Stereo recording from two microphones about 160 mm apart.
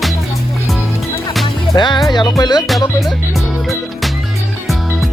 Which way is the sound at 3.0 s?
Centre (ahead or behind).